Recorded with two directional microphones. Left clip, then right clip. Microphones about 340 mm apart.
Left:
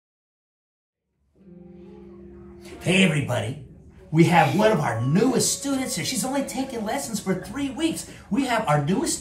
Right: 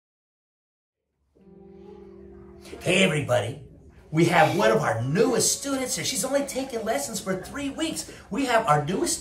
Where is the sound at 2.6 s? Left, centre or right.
Centre.